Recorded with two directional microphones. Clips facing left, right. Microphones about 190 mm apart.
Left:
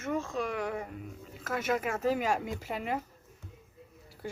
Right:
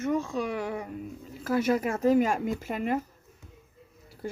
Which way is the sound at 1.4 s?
35° right (ahead or behind).